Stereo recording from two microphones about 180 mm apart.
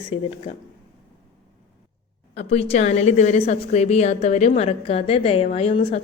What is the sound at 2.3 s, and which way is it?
A woman's voice, 35° left (ahead or behind).